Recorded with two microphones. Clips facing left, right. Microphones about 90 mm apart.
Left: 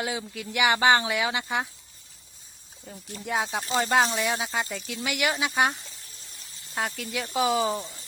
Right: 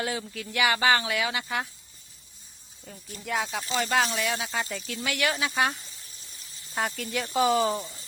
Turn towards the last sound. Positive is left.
turn(degrees=5)  # may be behind; listen again after turning